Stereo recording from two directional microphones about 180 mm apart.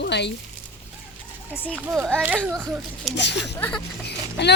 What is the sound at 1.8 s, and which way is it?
Speech, 10° right (ahead or behind).